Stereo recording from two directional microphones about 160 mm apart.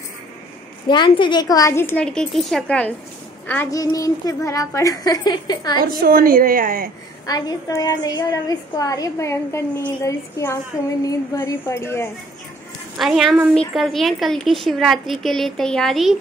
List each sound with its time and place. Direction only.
0.8 s a woman's voice: 30° left (ahead or behind)
5.8 s a woman's voice: 70° right (ahead or behind)
7.2 s a woman's voice: 25° left (ahead or behind)
12.9 s a woman's voice: centre (ahead or behind)